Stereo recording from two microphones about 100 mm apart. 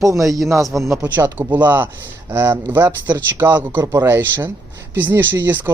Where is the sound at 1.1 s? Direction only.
20° right (ahead or behind).